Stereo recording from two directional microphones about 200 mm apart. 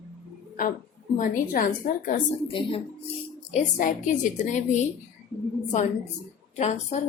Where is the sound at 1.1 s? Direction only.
40° left (ahead or behind).